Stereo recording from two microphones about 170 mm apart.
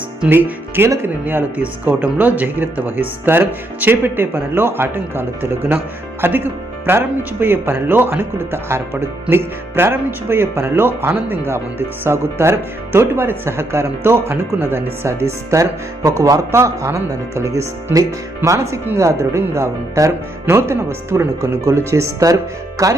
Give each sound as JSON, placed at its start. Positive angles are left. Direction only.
{"t": 0.2, "sound": "speech", "side_deg": -10}